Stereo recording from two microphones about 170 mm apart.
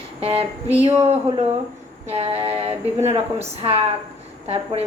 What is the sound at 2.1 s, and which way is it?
Speech, 35° right (ahead or behind).